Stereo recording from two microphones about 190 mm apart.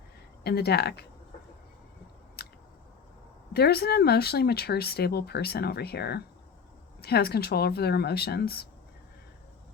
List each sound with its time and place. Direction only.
0.4 s speech: 60° left (ahead or behind)
3.5 s speech: 55° left (ahead or behind)